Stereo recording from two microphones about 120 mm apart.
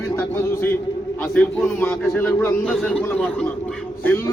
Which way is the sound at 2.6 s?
5° left (ahead or behind).